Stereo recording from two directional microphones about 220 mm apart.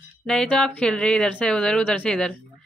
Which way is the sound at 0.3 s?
5° left (ahead or behind).